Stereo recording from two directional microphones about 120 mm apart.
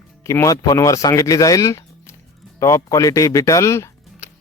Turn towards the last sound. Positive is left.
turn(degrees=25)  # may be behind; listen again after turning